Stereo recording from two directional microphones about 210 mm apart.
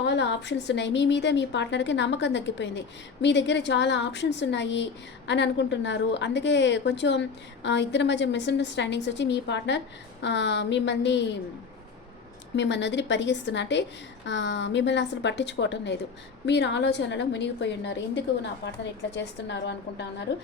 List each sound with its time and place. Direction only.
0.0 s a woman's voice: 55° left (ahead or behind)
12.5 s a woman's voice: 55° left (ahead or behind)